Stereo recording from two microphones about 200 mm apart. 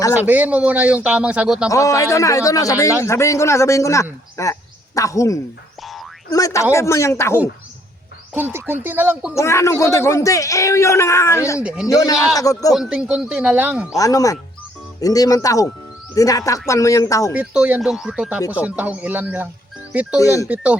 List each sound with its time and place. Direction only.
0.1 s a man's voice: 10° right (ahead or behind)
1.7 s speech: 15° left (ahead or behind)
8.3 s a man's voice: 10° right (ahead or behind)
9.3 s speech: 15° left (ahead or behind)
11.6 s speech: 5° right (ahead or behind)
11.9 s speech: 15° left (ahead or behind)
12.7 s speech: 5° right (ahead or behind)
13.9 s speech: 15° left (ahead or behind)
17.3 s a man's voice: 5° right (ahead or behind)
20.1 s speech: 15° left (ahead or behind)